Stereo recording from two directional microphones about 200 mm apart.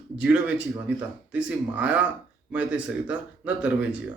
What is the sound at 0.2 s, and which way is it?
Speech, 5° right (ahead or behind).